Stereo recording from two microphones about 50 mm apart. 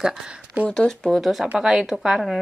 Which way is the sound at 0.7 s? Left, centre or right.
Centre.